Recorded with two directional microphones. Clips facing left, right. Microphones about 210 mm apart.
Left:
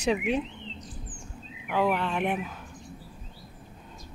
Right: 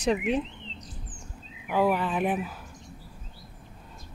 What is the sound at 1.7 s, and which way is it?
Speech, 10° right (ahead or behind).